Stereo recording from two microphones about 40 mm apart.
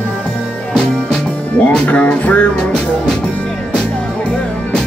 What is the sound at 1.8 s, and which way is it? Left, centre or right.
Music, left.